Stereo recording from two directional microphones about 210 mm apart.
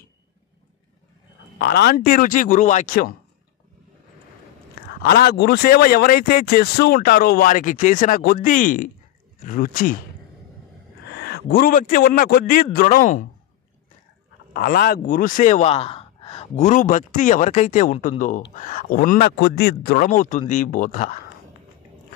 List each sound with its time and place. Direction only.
1.6 s speech: 50° left (ahead or behind)
5.0 s speech: 45° left (ahead or behind)
11.1 s a man's voice: 50° left (ahead or behind)
14.5 s speech: 45° left (ahead or behind)